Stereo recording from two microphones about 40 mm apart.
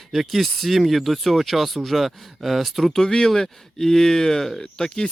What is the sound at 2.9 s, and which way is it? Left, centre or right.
Speech, centre.